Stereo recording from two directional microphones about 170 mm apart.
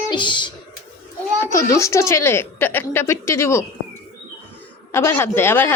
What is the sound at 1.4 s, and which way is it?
Speech, 15° left (ahead or behind).